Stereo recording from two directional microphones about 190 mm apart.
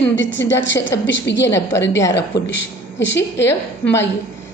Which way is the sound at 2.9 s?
70° left (ahead or behind).